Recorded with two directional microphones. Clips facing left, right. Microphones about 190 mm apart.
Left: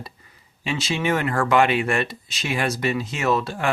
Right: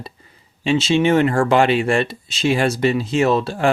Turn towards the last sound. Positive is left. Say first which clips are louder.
# right 5 dB
turn(degrees=-30)  # may be behind; listen again after turning